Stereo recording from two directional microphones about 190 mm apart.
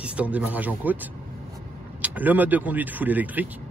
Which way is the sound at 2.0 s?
10° right (ahead or behind).